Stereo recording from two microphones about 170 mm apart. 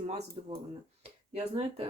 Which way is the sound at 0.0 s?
40° right (ahead or behind).